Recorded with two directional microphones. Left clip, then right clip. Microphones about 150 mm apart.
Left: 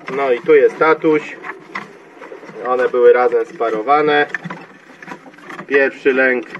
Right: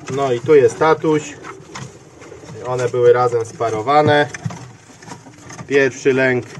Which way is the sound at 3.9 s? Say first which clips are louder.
Even; 30° right (ahead or behind).